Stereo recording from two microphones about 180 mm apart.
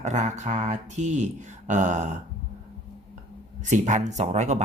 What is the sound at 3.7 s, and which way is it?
Speech, 40° right (ahead or behind).